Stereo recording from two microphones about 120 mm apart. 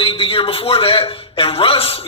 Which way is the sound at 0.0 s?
50° left (ahead or behind).